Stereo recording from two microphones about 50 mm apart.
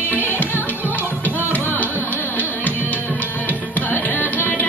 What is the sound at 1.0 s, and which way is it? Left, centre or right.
Music, right.